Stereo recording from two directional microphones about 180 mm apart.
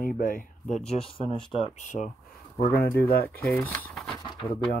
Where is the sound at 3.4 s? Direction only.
10° left (ahead or behind).